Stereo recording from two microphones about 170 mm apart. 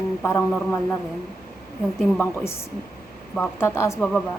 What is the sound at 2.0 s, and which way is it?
Speech, 15° left (ahead or behind).